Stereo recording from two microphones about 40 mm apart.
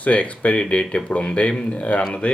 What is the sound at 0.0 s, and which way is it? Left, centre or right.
Speech, left.